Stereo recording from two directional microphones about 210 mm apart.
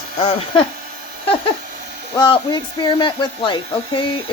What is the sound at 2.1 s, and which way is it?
Speech, 20° left (ahead or behind).